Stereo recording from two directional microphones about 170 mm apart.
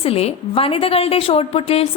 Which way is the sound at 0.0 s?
35° left (ahead or behind).